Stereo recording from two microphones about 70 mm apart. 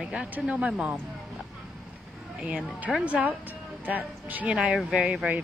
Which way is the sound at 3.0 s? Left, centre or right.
Right.